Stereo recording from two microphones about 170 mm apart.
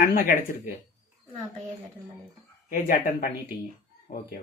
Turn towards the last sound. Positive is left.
turn(degrees=55)  # may be behind; listen again after turning